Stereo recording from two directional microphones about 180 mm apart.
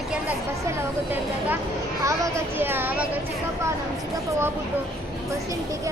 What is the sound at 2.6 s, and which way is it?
Speech, 10° right (ahead or behind).